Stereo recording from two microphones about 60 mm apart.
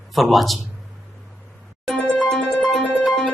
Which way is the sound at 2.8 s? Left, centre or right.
Left.